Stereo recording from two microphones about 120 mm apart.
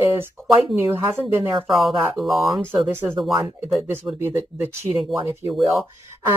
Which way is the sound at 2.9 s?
20° right (ahead or behind).